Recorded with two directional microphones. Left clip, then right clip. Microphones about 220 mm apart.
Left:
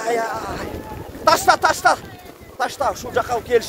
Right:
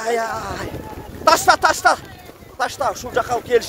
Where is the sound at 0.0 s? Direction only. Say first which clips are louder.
Even; 5° right (ahead or behind).